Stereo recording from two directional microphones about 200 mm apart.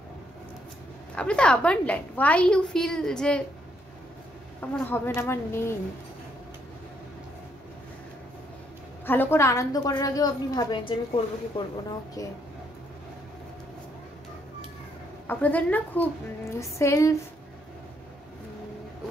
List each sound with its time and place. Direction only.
1.1 s a woman's voice: 5° left (ahead or behind)
4.6 s speech: 10° left (ahead or behind)
9.0 s a woman's voice: 10° left (ahead or behind)
15.2 s speech: 10° left (ahead or behind)